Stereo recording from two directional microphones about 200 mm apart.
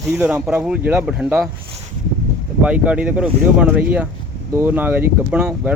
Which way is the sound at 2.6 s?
5° right (ahead or behind).